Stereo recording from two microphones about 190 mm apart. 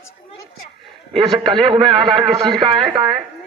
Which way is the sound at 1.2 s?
25° right (ahead or behind).